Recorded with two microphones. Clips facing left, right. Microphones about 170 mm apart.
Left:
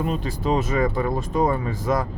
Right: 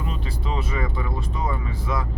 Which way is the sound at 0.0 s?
45° left (ahead or behind).